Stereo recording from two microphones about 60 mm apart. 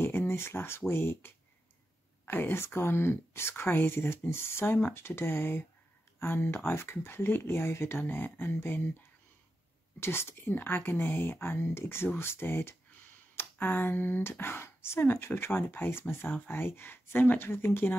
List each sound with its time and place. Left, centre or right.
0.0 s speech: left
9.9 s speech: left